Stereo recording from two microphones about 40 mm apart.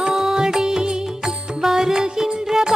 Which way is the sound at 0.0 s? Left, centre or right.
Centre.